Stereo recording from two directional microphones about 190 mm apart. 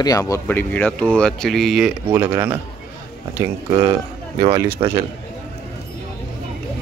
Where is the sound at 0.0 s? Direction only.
20° left (ahead or behind); by 2.0 s centre (ahead or behind).